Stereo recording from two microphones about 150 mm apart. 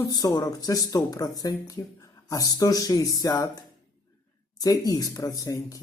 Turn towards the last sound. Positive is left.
turn(degrees=25)  # may be behind; listen again after turning